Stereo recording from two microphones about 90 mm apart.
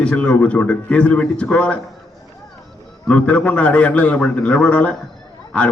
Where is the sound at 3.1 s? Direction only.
15° left (ahead or behind).